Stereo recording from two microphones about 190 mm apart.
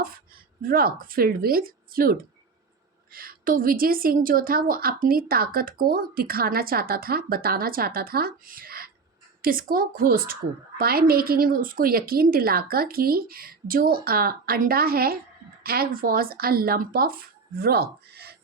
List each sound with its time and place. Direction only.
0.6 s a woman's voice: 50° right (ahead or behind)